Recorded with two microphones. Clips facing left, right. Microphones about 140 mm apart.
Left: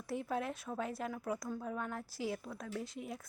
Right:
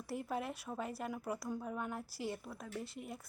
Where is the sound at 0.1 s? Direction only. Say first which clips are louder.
Left 2 dB; 5° right (ahead or behind).